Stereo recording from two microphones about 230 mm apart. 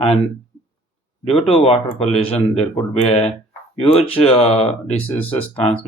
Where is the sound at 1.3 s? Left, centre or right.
Left.